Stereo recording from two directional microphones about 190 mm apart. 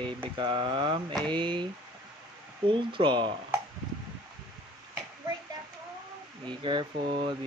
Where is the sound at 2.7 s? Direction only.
25° right (ahead or behind).